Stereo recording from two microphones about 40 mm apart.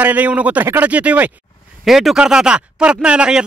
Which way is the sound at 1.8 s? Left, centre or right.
Centre.